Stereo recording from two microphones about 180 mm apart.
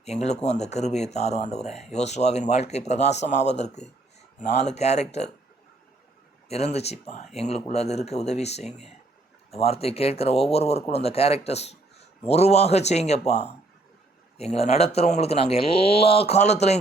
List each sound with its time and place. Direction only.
0.0 s speech: 40° left (ahead or behind)
6.5 s speech: 35° left (ahead or behind)